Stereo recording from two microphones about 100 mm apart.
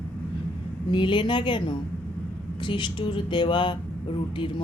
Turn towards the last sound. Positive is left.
turn(degrees=55)  # may be behind; listen again after turning